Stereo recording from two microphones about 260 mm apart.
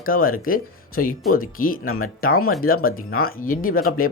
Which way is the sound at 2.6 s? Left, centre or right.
Left.